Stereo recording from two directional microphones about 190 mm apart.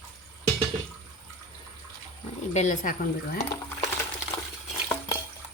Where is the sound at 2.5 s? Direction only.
40° left (ahead or behind).